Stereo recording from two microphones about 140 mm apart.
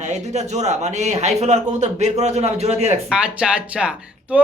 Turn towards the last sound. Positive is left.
turn(degrees=-10)  # may be behind; listen again after turning